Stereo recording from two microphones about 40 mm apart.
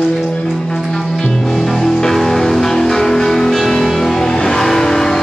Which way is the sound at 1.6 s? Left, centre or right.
Centre.